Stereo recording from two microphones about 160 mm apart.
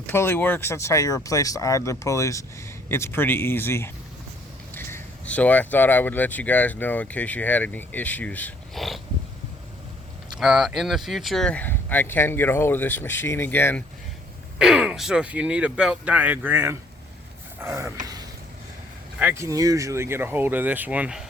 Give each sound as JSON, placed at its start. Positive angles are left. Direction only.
{"t": 0.0, "sound": "speech", "side_deg": 15}
{"t": 10.3, "sound": "speech", "side_deg": -5}
{"t": 14.6, "sound": "speech", "side_deg": -5}
{"t": 17.6, "sound": "a sound", "side_deg": -20}
{"t": 19.2, "sound": "speech", "side_deg": -15}